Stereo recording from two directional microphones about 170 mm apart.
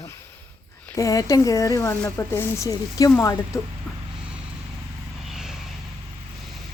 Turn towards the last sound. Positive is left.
turn(degrees=0)  # may be behind; listen again after turning